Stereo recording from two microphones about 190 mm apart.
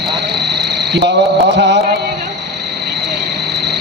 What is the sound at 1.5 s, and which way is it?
Cricket, 65° right (ahead or behind).